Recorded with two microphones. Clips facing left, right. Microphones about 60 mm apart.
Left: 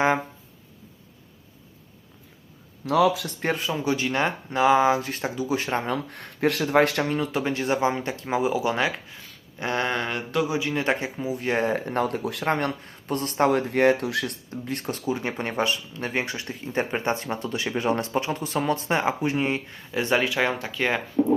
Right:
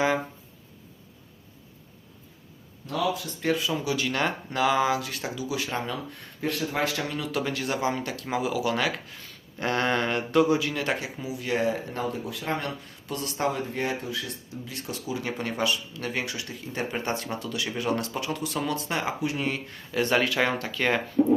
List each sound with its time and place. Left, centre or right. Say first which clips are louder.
2.8 s speech: left 7 dB; left
3.4 s speech: left 1 dB; left
6.1 s speech: left 6 dB; left
7.0 s speech: left 4 dB; left; by 10.6 s centre
10.6 s speech: left 3 dB; left
12.5 s speech: left 6 dB; left
13.6 s speech: left 9 dB; left
14.6 s speech: left 8 dB; left
19.7 s speech: right 3 dB; centre